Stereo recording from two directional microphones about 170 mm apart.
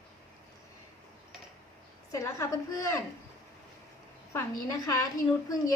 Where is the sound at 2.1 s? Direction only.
20° left (ahead or behind).